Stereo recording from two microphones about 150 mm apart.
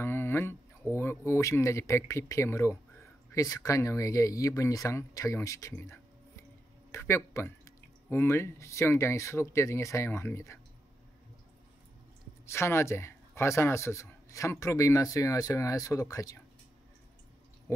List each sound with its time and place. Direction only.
0.0 s speech: 15° left (ahead or behind)
12.4 s speech: 15° left (ahead or behind)
17.7 s a sound: 20° left (ahead or behind)